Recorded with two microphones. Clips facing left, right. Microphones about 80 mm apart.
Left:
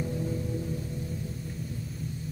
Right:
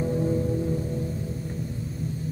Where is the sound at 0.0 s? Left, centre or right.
Right.